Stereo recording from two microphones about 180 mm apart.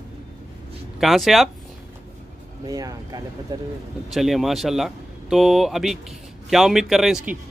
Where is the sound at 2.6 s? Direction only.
20° right (ahead or behind).